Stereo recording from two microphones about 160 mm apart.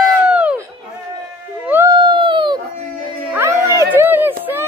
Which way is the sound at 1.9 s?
30° right (ahead or behind).